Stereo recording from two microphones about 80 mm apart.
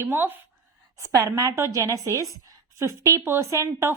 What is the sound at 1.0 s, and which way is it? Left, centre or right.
A woman's voice, right.